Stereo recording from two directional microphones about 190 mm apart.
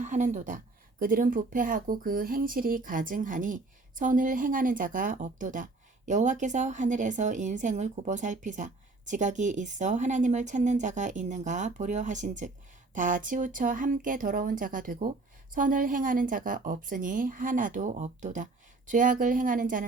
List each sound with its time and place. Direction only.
0.0 s speech: 40° right (ahead or behind)